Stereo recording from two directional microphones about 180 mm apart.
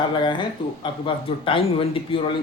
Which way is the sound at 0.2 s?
25° left (ahead or behind).